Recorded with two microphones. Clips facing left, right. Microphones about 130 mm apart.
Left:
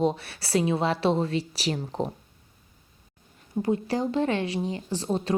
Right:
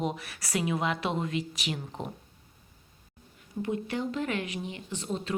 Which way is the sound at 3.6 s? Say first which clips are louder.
Left 5 dB; 35° left (ahead or behind).